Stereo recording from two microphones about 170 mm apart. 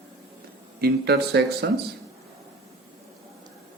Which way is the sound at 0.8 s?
70° right (ahead or behind).